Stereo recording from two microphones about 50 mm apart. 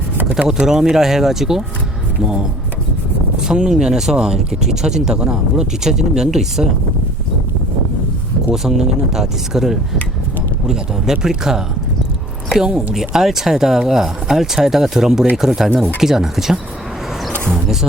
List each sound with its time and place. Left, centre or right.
0.4 s speech: centre
3.4 s speech: centre
8.5 s speech: centre
12.6 s speech: centre
15.7 s speech: right
16.0 s speech: centre